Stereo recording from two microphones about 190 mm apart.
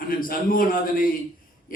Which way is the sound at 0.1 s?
50° left (ahead or behind).